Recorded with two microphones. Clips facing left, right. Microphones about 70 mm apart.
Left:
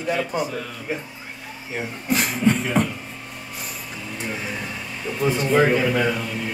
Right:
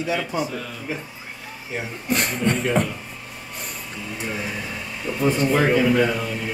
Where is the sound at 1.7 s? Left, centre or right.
Centre.